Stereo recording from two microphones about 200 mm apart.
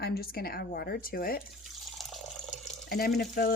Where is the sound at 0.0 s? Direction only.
50° left (ahead or behind).